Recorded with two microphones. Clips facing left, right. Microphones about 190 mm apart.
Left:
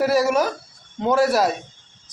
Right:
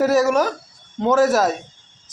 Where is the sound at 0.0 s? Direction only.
45° right (ahead or behind).